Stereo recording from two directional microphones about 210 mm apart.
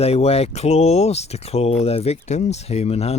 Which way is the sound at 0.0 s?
30° left (ahead or behind).